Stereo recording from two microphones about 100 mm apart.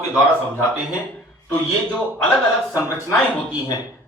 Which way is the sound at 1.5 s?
15° left (ahead or behind).